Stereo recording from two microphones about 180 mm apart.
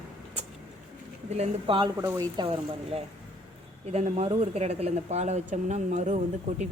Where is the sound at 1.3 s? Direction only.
35° right (ahead or behind).